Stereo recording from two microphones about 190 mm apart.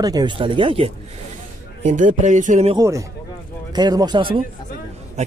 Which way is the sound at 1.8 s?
40° right (ahead or behind).